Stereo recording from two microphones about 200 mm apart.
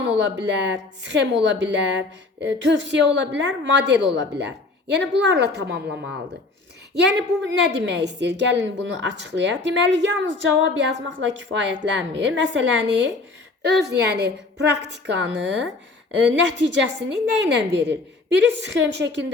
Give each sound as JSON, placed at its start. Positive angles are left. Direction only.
{"t": 0.2, "sound": "a woman's voice", "side_deg": -60}
{"t": 6.9, "sound": "a woman's voice", "side_deg": -55}